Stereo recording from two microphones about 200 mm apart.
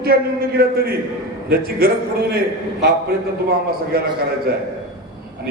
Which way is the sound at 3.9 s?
50° right (ahead or behind).